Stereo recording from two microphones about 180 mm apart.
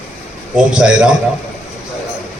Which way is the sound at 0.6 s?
5° right (ahead or behind).